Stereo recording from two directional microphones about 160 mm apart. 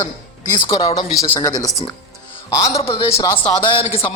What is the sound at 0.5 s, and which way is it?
A man's voice, 25° left (ahead or behind).